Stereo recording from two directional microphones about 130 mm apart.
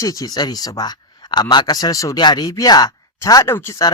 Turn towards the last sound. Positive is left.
turn(degrees=20)  # may be behind; listen again after turning